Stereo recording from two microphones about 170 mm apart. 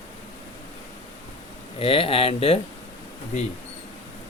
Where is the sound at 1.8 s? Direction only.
35° left (ahead or behind).